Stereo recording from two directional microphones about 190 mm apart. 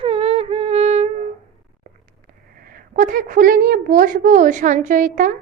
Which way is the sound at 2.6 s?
50° right (ahead or behind).